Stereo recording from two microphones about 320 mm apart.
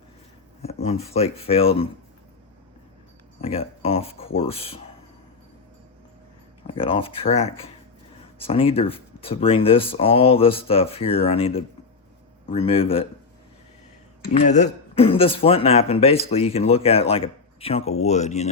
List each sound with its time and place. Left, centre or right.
0.6 s speech: centre
3.4 s speech: centre
6.7 s speech: centre
14.3 s speech: left